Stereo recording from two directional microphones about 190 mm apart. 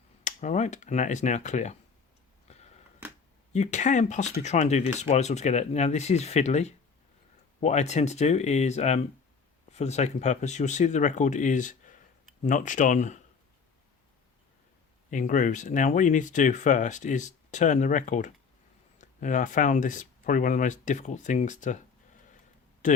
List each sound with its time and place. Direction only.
0.3 s speech: 40° left (ahead or behind)
2.5 s a sound: 35° left (ahead or behind)
3.5 s speech: 35° left (ahead or behind)
15.1 s speech: 40° left (ahead or behind)